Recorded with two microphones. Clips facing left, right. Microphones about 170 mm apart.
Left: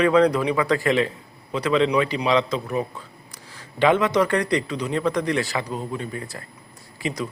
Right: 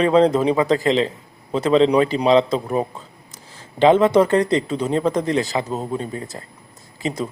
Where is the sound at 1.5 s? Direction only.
30° right (ahead or behind).